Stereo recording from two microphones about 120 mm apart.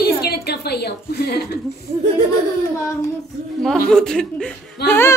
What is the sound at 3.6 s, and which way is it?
Speech, 5° left (ahead or behind).